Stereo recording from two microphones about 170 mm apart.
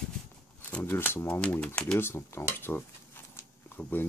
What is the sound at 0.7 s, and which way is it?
Speech, 10° left (ahead or behind).